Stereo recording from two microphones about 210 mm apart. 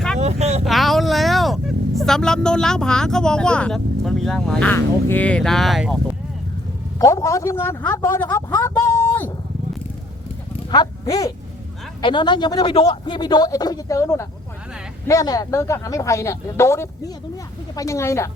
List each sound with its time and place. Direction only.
0.2 s vehicle: 30° right (ahead or behind)
0.6 s speech: centre (ahead or behind)
7.0 s speech: 15° left (ahead or behind)
10.7 s a man's voice: 20° left (ahead or behind)